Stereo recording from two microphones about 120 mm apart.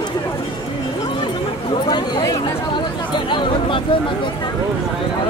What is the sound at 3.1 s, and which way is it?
Speech, 40° left (ahead or behind).